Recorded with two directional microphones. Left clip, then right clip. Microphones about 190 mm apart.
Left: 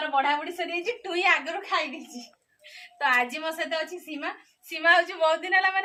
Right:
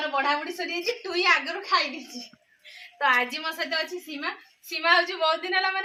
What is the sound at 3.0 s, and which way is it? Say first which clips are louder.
Speech: right 1 dB; 30° left (ahead or behind).